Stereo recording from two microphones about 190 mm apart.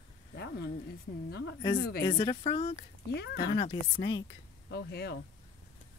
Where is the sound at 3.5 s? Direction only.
25° left (ahead or behind).